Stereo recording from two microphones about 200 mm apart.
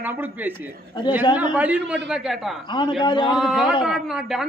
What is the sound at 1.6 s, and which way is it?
A woman's voice, 5° right (ahead or behind).